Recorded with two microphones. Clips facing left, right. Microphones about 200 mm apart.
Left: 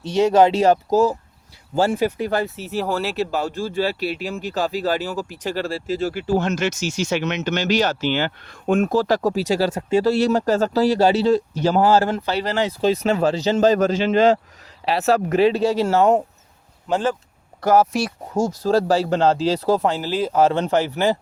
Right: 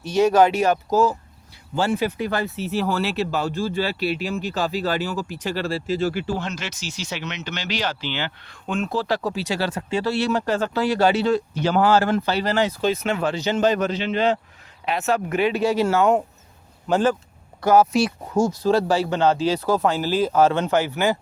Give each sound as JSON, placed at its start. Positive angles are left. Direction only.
{"t": 0.0, "sound": "speech", "side_deg": 25}
{"t": 16.9, "sound": "speech", "side_deg": 25}
{"t": 17.6, "sound": "speech", "side_deg": 40}